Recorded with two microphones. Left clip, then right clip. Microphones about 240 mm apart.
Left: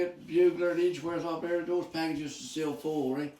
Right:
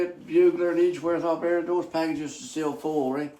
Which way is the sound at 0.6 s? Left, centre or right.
Right.